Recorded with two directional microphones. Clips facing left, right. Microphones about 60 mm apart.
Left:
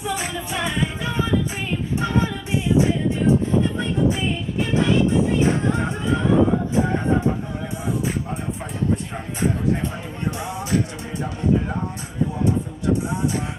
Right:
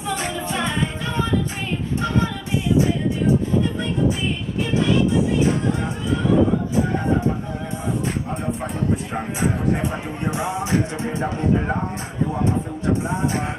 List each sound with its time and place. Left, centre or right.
0.1 s music: centre
9.8 s music: right